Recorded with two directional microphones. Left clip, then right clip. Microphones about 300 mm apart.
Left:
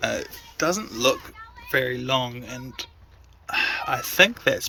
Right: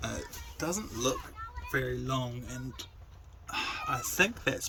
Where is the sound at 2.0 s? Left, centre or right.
Centre.